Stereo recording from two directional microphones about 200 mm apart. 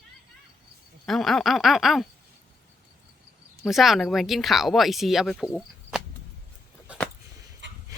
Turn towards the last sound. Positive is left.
turn(degrees=-65)  # may be behind; listen again after turning